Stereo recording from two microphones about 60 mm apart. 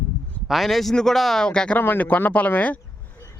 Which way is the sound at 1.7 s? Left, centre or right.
Left.